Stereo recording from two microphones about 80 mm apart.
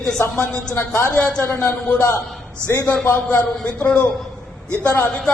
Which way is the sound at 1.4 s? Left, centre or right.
Left.